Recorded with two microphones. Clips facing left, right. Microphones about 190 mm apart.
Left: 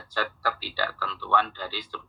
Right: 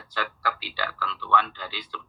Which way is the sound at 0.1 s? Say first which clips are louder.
Left 1 dB; 45° left (ahead or behind).